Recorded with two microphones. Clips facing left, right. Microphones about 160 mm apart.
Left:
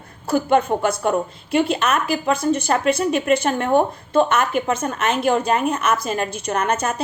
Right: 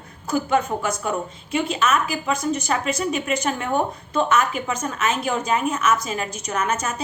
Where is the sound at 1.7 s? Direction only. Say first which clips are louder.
Left 2 dB; 60° left (ahead or behind).